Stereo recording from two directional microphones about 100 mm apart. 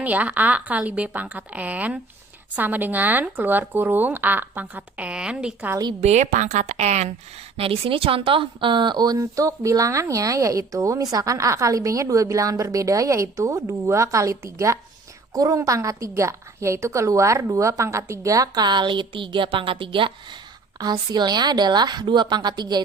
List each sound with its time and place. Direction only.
0.0 s speech: 15° right (ahead or behind)
7.5 s speech: 70° right (ahead or behind)
20.7 s a woman's voice: 40° right (ahead or behind)